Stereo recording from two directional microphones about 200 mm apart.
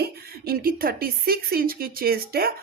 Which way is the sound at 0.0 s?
50° right (ahead or behind).